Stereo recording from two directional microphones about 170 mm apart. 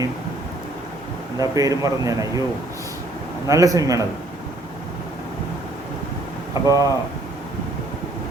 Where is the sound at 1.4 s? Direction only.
20° right (ahead or behind).